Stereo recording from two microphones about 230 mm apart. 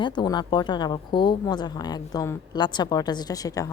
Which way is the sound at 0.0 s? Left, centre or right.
Centre.